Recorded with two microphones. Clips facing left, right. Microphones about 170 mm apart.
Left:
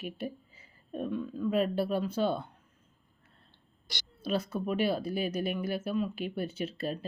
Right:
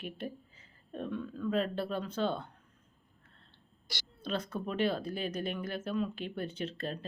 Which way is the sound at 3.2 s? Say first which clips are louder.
Left 1 dB; 15° left (ahead or behind).